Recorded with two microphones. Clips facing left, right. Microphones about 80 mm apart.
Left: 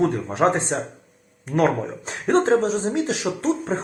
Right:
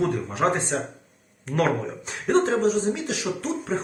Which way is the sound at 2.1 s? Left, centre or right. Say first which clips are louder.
Left 3 dB; left.